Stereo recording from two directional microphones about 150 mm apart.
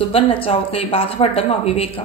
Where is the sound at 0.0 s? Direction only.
40° left (ahead or behind).